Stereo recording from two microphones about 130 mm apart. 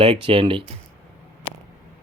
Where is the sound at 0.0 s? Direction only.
45° right (ahead or behind).